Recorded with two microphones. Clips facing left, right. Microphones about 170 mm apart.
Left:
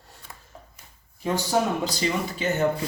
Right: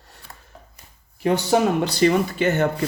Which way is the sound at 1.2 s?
65° right (ahead or behind).